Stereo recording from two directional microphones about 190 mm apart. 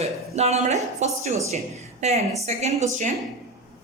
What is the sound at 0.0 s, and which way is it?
Speech, 35° right (ahead or behind).